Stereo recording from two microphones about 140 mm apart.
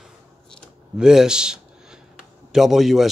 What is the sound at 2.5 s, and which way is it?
Speech, centre (ahead or behind).